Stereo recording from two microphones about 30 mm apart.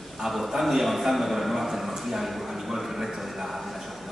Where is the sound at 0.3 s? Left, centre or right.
Centre.